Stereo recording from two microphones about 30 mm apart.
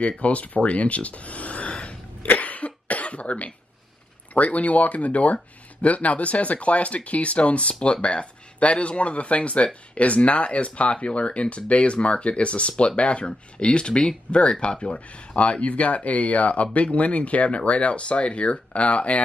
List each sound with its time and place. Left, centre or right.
0.2 s speech: left
2.3 s cough: left
4.3 s speech: left